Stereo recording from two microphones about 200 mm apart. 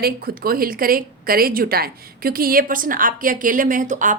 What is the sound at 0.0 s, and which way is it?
A woman's voice, 50° right (ahead or behind).